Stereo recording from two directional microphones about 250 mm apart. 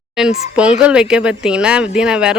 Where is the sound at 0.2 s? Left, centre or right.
Centre.